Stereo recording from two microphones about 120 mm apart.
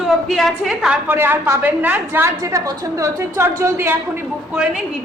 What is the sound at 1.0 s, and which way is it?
A woman's voice, 20° right (ahead or behind).